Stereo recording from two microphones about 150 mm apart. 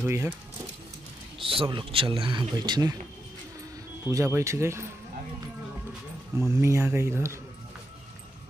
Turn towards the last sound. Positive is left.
turn(degrees=-20)  # may be behind; listen again after turning